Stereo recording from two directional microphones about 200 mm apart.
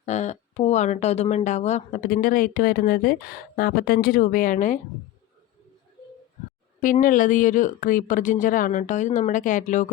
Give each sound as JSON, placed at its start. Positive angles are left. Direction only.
{"t": 0.0, "sound": "speech", "side_deg": 35}
{"t": 6.8, "sound": "speech", "side_deg": 40}